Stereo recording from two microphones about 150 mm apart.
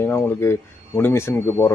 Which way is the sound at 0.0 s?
15° left (ahead or behind).